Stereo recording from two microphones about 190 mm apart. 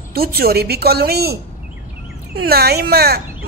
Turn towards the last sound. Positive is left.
turn(degrees=-55)  # may be behind; listen again after turning